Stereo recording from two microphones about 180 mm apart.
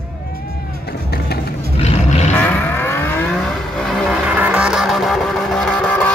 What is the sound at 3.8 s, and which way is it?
Vehicle, 5° right (ahead or behind).